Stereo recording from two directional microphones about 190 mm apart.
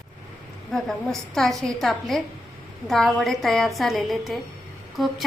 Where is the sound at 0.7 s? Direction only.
Centre (ahead or behind).